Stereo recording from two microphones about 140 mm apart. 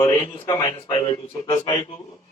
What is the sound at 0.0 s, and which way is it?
A man's voice, 25° left (ahead or behind).